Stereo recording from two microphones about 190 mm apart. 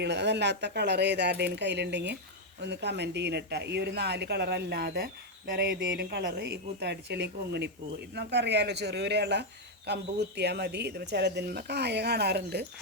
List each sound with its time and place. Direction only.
0.0 s speech: 65° right (ahead or behind)